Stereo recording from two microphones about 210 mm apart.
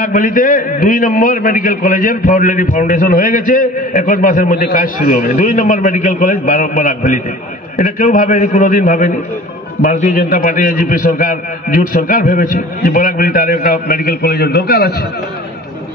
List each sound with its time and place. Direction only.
0.0 s a man's voice: 40° left (ahead or behind)